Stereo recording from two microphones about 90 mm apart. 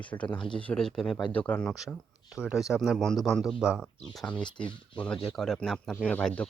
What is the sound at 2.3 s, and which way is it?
Speech, 10° right (ahead or behind).